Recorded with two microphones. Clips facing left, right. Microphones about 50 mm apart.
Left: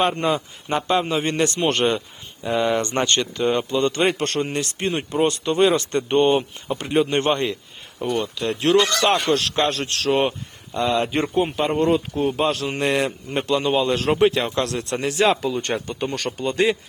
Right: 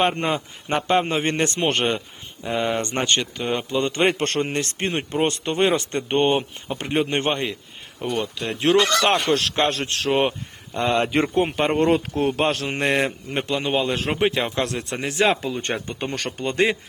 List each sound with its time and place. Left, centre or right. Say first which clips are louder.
0.0 s a man's voice: left 1 dB; right
1.6 s speech: left 2 dB; right
4.1 s a man's voice: even; right
7.2 s a man's voice: left 3 dB; centre; by 10.1 s right
10.1 s a man's voice: left 1 dB; centre
10.8 s a man's voice: even; right
11.2 s speech: right 1 dB; right
11.7 s a man's voice: even; right
13.1 s a man's voice: left 3 dB; right